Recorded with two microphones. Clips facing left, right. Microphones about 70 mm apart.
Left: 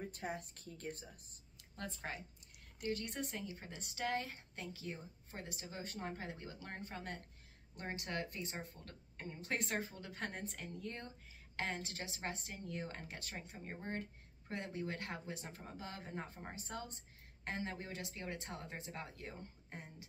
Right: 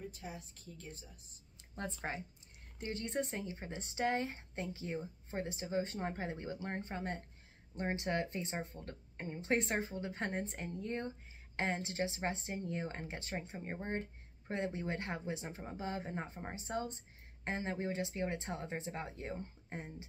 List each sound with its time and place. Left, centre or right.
0.0 s a woman's voice: left
1.6 s a sound: right
2.0 s speech: right